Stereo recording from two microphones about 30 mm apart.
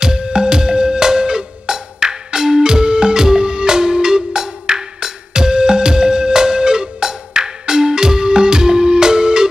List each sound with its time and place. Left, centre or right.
0.2 s music: right